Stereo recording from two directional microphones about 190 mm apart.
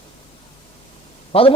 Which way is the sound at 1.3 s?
30° left (ahead or behind).